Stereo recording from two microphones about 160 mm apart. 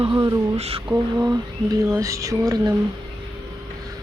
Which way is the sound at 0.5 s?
35° right (ahead or behind).